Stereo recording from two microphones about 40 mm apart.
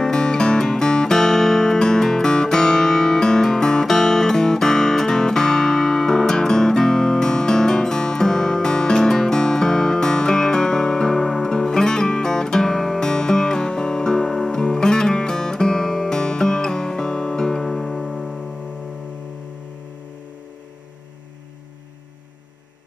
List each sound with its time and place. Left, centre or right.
0.0 s music: centre
17.6 s music: centre